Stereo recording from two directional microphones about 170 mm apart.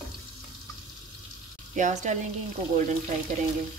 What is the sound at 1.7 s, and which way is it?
Speech, 45° right (ahead or behind).